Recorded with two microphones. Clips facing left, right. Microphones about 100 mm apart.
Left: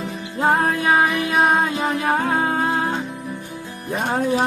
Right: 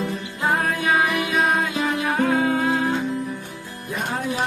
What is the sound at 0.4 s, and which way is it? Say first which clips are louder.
Music: left 4 dB; 35° left (ahead or behind).